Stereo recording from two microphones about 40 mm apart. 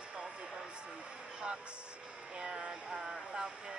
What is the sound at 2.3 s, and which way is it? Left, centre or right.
Speech, right.